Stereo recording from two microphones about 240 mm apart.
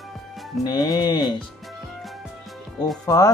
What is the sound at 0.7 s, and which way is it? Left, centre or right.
Speech, centre.